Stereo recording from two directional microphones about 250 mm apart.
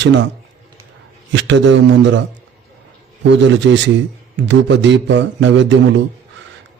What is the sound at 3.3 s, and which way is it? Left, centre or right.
A man's voice, right.